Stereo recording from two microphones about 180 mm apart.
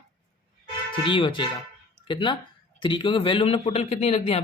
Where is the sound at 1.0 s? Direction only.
25° left (ahead or behind).